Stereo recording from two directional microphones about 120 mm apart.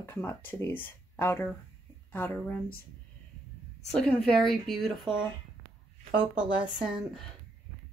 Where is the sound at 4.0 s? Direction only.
5° left (ahead or behind).